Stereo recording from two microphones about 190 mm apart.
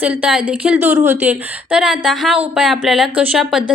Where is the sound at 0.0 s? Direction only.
5° right (ahead or behind).